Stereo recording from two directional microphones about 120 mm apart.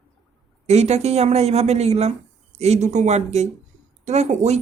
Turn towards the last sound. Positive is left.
turn(degrees=-75)  # may be behind; listen again after turning